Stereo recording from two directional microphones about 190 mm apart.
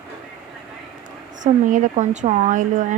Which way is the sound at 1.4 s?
40° right (ahead or behind).